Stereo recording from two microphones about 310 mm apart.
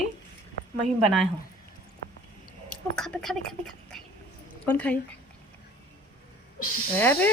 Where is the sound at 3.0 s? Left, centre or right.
Centre.